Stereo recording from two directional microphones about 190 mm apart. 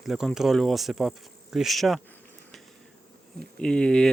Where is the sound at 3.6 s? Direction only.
5° left (ahead or behind).